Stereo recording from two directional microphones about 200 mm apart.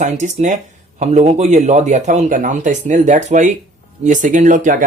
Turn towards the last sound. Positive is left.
turn(degrees=-40)  # may be behind; listen again after turning